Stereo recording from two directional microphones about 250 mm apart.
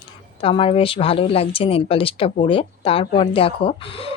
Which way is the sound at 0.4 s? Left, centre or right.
Left.